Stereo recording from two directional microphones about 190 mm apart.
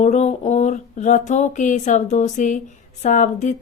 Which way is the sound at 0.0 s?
35° left (ahead or behind).